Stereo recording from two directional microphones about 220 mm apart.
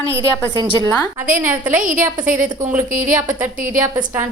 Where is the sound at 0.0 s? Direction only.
15° right (ahead or behind).